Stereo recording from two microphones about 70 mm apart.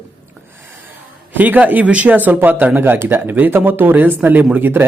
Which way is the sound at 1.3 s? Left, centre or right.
Right.